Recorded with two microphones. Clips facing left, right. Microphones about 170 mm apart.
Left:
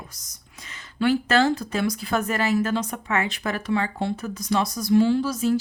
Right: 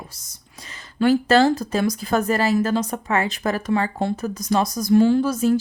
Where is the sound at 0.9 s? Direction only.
40° right (ahead or behind).